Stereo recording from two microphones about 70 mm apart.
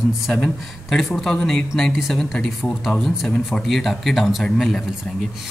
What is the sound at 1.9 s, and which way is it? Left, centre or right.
A man's voice, centre.